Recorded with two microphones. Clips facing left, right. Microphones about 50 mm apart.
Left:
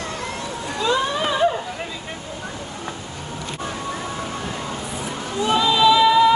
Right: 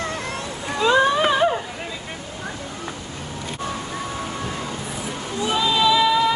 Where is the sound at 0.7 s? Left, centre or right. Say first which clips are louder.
Right 4 dB; right.